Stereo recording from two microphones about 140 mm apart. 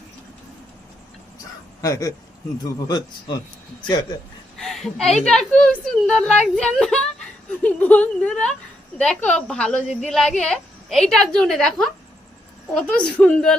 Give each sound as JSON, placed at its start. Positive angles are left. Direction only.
{"t": 1.8, "sound": "speech", "side_deg": 25}
{"t": 4.5, "sound": "a woman's voice", "side_deg": 0}
{"t": 13.0, "sound": "speech", "side_deg": 10}